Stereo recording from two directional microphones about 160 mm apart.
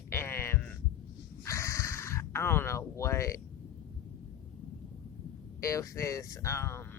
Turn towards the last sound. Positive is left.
turn(degrees=15)  # may be behind; listen again after turning